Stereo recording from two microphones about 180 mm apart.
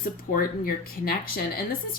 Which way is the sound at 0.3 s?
55° left (ahead or behind).